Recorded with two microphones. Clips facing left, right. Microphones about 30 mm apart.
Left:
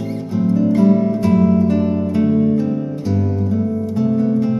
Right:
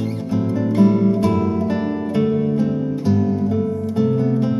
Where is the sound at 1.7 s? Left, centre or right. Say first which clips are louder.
Left 4 dB; centre.